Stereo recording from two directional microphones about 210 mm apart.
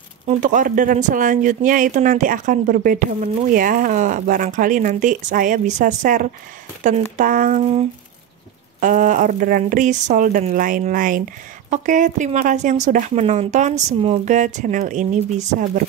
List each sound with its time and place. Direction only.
0.3 s speech: 35° right (ahead or behind)